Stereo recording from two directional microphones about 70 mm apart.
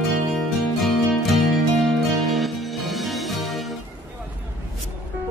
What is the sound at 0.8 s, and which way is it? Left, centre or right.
Music, centre.